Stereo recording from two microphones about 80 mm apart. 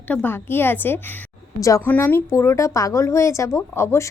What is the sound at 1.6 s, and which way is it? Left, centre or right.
Speech, left.